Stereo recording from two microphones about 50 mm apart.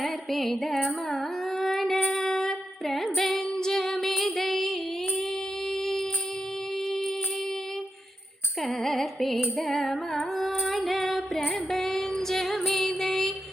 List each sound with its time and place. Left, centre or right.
0.0 s music: centre
0.9 s carnatic music: centre
2.1 s music: centre
4.2 s female singing: centre
5.8 s a sound: centre
8.6 s music: centre
10.7 s female singing: centre